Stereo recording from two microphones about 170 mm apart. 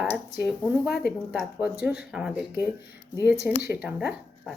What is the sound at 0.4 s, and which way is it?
Speech, 5° right (ahead or behind).